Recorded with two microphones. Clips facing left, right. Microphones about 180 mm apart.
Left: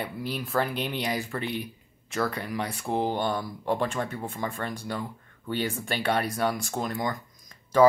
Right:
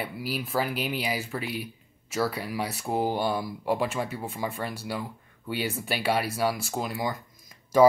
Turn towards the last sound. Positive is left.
turn(degrees=-10)  # may be behind; listen again after turning